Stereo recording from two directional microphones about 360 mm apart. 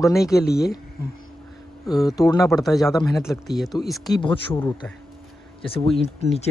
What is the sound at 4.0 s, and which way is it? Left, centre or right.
Speech, centre.